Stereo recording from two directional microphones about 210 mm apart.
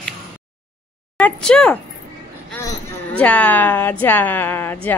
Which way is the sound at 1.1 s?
5° left (ahead or behind).